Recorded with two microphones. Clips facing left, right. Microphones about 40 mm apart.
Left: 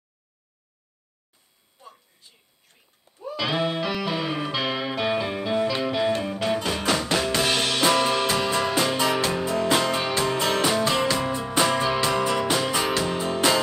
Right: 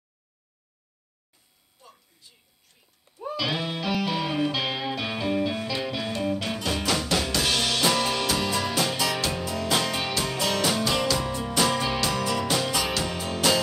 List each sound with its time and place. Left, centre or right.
1.8 s a sound: left
3.3 s music: left
4.6 s music: left
6.8 s music: left